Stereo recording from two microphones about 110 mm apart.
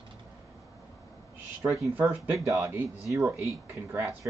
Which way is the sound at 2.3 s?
25° right (ahead or behind).